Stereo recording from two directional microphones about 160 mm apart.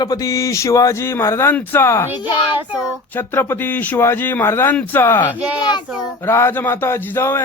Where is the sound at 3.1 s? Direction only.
15° left (ahead or behind).